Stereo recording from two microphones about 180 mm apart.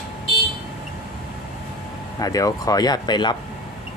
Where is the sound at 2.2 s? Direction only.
20° left (ahead or behind).